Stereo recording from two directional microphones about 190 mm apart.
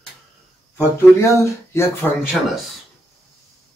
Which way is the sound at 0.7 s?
10° left (ahead or behind).